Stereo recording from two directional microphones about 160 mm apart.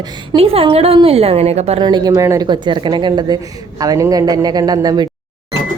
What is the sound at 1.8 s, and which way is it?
A woman's voice, 25° right (ahead or behind).